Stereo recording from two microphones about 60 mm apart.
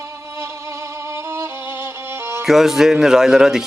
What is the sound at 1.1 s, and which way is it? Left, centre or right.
Music, right.